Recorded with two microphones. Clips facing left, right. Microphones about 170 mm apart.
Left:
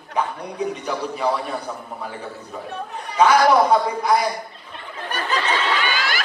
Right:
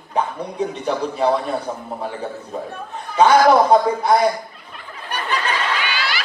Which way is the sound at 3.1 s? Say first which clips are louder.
Right 2 dB; 30° right (ahead or behind).